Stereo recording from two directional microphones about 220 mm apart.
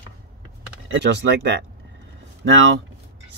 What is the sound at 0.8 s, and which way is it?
Speech, 55° right (ahead or behind).